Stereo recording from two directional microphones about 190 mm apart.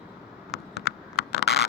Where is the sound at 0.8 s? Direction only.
60° left (ahead or behind).